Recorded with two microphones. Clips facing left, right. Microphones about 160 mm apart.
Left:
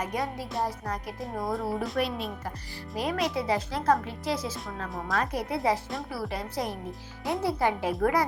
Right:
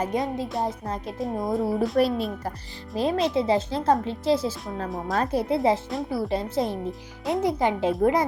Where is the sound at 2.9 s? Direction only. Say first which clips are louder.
Right 6 dB; 25° right (ahead or behind).